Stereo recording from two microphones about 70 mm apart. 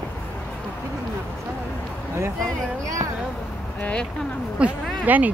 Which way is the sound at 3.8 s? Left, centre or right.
Centre.